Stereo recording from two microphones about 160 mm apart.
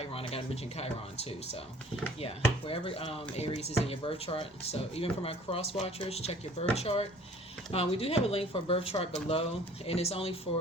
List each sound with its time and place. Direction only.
0.0 s speech: 40° left (ahead or behind)